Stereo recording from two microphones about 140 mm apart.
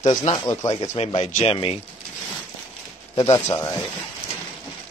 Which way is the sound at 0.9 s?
50° left (ahead or behind).